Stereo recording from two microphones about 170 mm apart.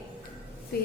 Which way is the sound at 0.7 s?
65° left (ahead or behind).